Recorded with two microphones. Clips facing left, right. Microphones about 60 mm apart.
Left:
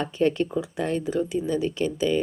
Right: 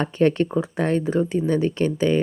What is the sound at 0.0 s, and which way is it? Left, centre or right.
A woman's voice, right.